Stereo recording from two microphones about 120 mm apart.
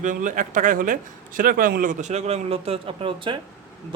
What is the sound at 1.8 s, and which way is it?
A man's voice, 75° right (ahead or behind).